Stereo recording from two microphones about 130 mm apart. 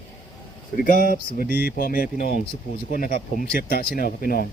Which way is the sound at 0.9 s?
90° left.